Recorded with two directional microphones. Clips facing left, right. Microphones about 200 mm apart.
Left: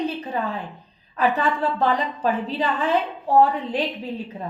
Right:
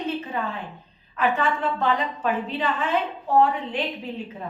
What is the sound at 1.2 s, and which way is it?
A woman's voice, 35° left (ahead or behind).